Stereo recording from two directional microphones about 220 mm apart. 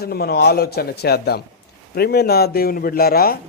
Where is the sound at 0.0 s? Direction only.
45° left (ahead or behind).